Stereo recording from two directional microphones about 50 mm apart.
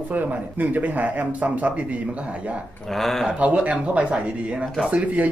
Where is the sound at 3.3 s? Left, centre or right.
Right.